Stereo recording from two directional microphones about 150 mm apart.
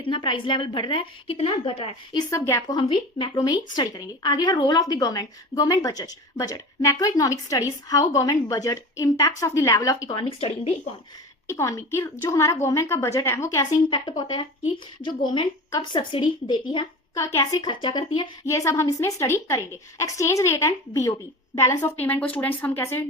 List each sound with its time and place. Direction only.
0.0 s a woman's voice: 35° left (ahead or behind)
2.3 s a woman's voice: 20° left (ahead or behind); by 10.7 s 40° left (ahead or behind)
11.4 s a woman's voice: 20° left (ahead or behind)
18.4 s a woman's voice: 20° left (ahead or behind)